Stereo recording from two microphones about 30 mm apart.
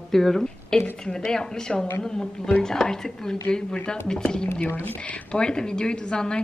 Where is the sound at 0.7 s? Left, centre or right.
Left.